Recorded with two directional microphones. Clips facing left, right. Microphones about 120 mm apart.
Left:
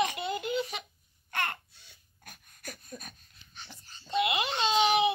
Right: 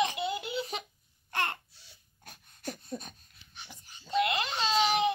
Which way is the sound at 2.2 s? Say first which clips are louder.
Right 6 dB; 30° right (ahead or behind).